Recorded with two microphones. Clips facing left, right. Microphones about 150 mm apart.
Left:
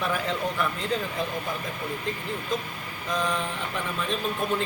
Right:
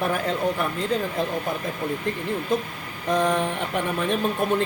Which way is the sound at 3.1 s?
60° right (ahead or behind).